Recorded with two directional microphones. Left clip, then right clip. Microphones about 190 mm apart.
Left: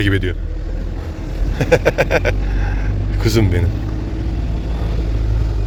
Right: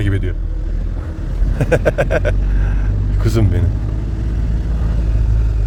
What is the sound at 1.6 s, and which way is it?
A man's voice, 20° right (ahead or behind).